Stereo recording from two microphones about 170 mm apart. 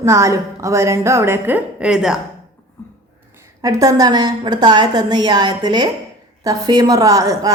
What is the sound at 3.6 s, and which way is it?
A woman's voice, 20° right (ahead or behind).